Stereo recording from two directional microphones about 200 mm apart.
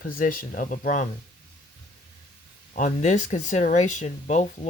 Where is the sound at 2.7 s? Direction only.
35° left (ahead or behind).